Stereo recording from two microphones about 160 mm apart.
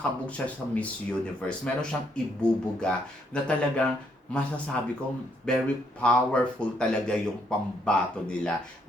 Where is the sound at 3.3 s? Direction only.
5° left (ahead or behind).